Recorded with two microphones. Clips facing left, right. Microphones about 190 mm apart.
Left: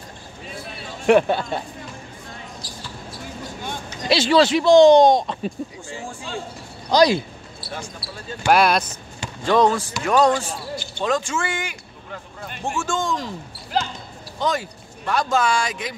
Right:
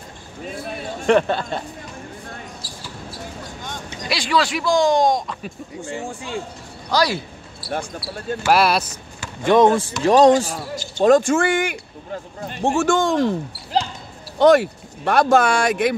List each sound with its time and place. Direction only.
1.0 s speech: 10° left (ahead or behind)
4.1 s speech: 25° left (ahead or behind)
6.9 s speech: 15° left (ahead or behind)
8.5 s speech: 5° right (ahead or behind)
9.4 s speech: 20° right (ahead or behind)
11.0 s speech: 50° right (ahead or behind)
12.1 s speech: 35° right (ahead or behind)
12.7 s speech: 65° right (ahead or behind)
14.4 s speech: 65° right (ahead or behind)